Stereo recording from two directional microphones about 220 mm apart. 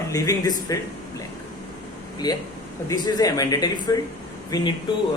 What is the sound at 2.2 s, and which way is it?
Speech, 20° left (ahead or behind).